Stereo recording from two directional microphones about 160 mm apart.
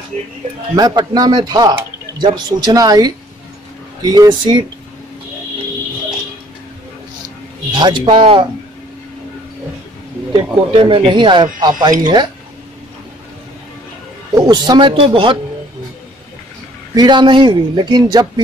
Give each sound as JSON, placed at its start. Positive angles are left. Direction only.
{"t": 0.7, "sound": "speech", "side_deg": -25}
{"t": 7.7, "sound": "a man's voice", "side_deg": -30}
{"t": 10.3, "sound": "speech", "side_deg": -35}
{"t": 14.3, "sound": "speech", "side_deg": -25}
{"t": 16.9, "sound": "speech", "side_deg": -25}